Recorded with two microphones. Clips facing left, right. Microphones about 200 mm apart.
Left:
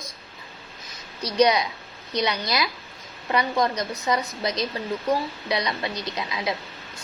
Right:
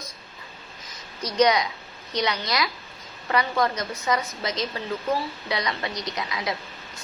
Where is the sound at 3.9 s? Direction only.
35° left (ahead or behind).